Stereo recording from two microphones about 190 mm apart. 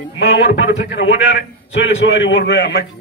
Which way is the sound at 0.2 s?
65° left (ahead or behind).